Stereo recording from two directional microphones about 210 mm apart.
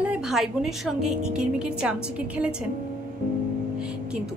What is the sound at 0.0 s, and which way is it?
A woman's voice, 5° right (ahead or behind).